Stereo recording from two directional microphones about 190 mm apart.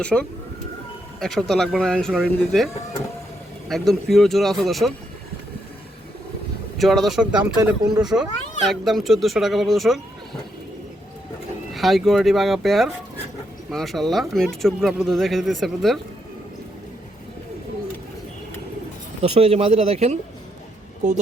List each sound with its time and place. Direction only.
0.0 s speech: 5° left (ahead or behind)
3.7 s speech: centre (ahead or behind)
6.7 s speech: centre (ahead or behind)
11.7 s speech: centre (ahead or behind)
19.2 s speech: 30° right (ahead or behind)